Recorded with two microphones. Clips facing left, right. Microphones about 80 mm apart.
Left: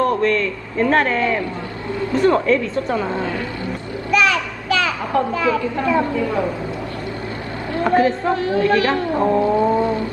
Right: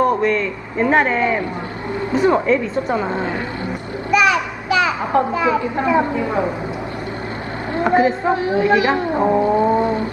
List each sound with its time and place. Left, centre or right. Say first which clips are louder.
0.0 s a man's voice: right 1 dB; centre
4.1 s a sound: right 2 dB; centre
7.7 s a woman's voice: right 1 dB; centre